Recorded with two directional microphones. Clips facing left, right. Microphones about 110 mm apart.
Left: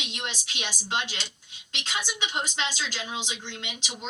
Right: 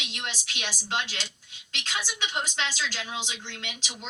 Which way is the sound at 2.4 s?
20° left (ahead or behind).